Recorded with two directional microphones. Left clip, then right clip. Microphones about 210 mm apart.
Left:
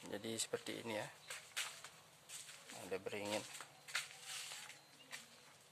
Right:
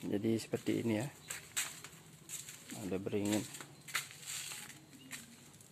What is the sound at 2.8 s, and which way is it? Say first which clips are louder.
Speech: right 6 dB; 10° right (ahead or behind).